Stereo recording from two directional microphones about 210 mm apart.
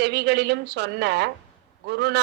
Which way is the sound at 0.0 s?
50° right (ahead or behind).